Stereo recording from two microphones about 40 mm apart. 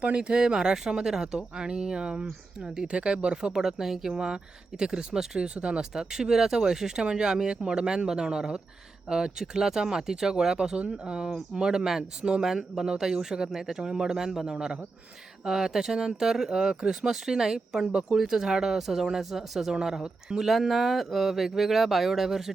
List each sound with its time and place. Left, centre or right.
0.2 s speech: centre
4.1 s speech: centre
5.9 s speech: centre
14.5 s speech: right